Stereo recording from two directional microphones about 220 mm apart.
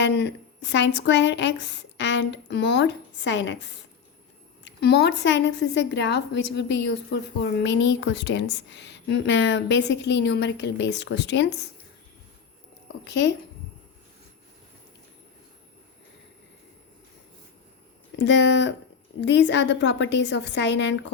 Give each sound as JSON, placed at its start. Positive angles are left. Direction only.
{"t": 0.0, "sound": "a woman's voice", "side_deg": 50}
{"t": 13.1, "sound": "a woman's voice", "side_deg": 50}
{"t": 18.2, "sound": "a woman's voice", "side_deg": 55}